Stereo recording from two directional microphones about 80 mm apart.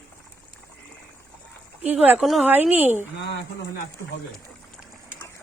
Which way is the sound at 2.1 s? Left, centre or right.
Centre.